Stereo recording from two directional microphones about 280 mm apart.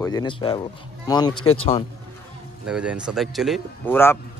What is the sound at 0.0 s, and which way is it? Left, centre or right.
A man's voice, centre.